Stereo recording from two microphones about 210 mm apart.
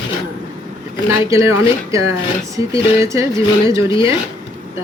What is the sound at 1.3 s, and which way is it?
Speech, 15° right (ahead or behind).